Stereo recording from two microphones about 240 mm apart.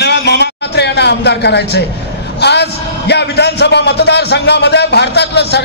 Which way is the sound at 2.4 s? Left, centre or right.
Left.